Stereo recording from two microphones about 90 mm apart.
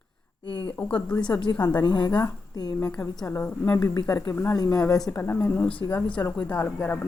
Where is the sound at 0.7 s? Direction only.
15° left (ahead or behind).